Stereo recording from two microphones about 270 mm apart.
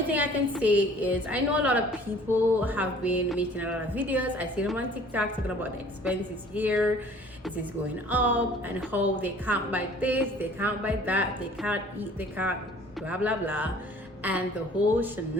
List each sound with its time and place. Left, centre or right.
0.1 s a woman's voice: centre
8.1 s a woman's voice: centre